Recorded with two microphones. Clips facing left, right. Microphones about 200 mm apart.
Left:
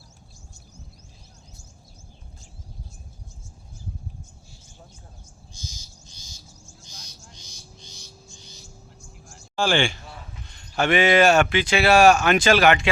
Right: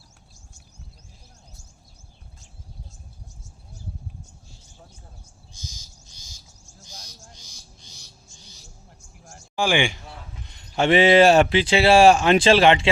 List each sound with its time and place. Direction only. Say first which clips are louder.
9.6 s a man's voice: even; 15° right (ahead or behind)